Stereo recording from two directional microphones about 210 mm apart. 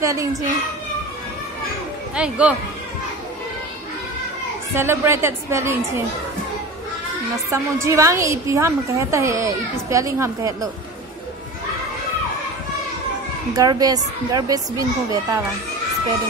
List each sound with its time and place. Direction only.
0.0 s a woman's voice: 15° right (ahead or behind)
2.1 s speech: 5° right (ahead or behind)
4.7 s a woman's voice: 10° right (ahead or behind)
7.5 s a woman's voice: 15° right (ahead or behind)
13.5 s a woman's voice: 20° right (ahead or behind)